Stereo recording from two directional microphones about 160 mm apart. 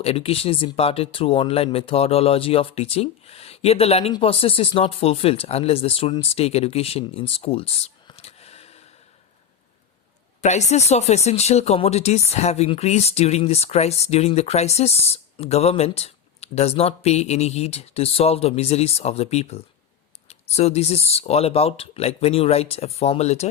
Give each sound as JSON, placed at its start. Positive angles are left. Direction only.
{"t": 0.0, "sound": "speech", "side_deg": 40}
{"t": 10.4, "sound": "speech", "side_deg": 45}